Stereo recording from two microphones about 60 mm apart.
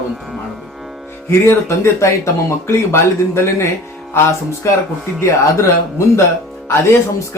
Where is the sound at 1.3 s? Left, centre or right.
Left.